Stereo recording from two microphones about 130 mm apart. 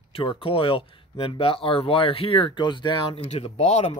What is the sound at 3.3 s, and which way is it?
Speech, 55° left (ahead or behind).